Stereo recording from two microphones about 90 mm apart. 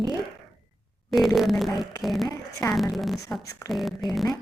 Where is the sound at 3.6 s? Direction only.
Centre (ahead or behind).